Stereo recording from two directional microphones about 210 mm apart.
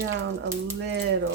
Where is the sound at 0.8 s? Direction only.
55° right (ahead or behind).